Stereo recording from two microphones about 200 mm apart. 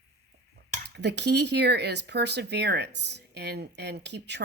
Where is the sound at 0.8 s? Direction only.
55° right (ahead or behind).